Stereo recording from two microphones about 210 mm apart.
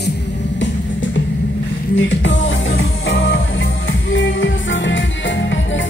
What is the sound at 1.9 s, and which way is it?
Music, 60° left (ahead or behind).